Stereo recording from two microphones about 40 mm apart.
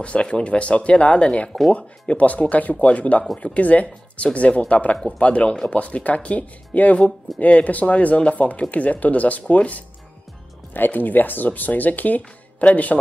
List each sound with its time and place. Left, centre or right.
0.0 s speech: left
10.7 s speech: left
12.2 s speech: left